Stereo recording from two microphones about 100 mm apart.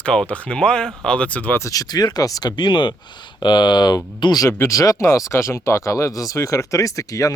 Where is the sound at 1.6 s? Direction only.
35° left (ahead or behind).